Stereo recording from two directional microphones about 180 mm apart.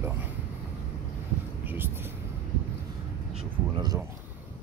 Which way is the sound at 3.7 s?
20° right (ahead or behind).